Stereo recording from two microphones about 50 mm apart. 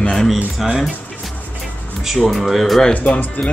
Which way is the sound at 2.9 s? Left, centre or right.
Left.